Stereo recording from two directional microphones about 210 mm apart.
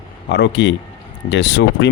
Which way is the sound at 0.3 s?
55° left (ahead or behind).